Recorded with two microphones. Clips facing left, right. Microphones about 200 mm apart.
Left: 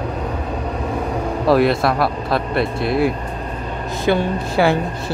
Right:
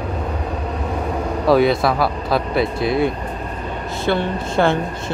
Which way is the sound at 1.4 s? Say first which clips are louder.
Even; centre (ahead or behind).